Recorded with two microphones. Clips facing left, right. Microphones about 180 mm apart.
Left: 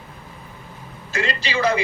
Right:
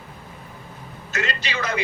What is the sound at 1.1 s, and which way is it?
Speech, 30° left (ahead or behind).